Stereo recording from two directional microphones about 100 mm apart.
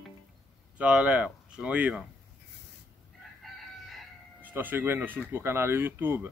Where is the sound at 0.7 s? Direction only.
10° right (ahead or behind).